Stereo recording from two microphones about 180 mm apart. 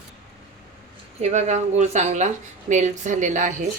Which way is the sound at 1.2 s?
40° right (ahead or behind).